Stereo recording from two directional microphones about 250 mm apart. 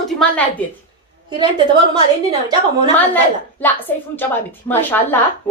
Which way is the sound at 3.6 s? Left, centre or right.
Centre.